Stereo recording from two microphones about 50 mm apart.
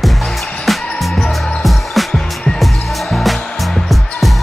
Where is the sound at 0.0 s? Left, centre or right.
Centre.